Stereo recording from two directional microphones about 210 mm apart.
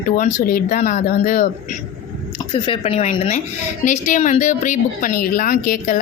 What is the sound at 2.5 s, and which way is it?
A woman's voice, 25° left (ahead or behind).